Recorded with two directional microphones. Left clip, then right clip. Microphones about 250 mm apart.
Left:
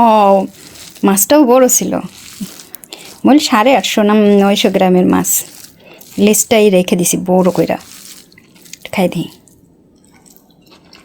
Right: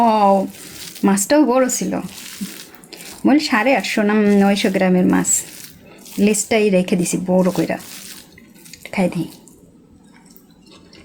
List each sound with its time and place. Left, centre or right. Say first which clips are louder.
0.0 s frying: left 5 dB; left
1.0 s speech: left 6 dB; left
8.7 s a sound: left 5 dB; left